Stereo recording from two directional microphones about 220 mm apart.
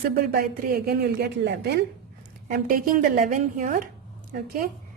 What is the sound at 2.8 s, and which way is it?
A woman's voice, 40° right (ahead or behind).